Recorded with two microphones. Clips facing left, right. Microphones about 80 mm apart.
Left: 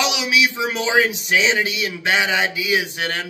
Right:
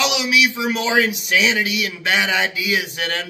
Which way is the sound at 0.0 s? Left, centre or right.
Left.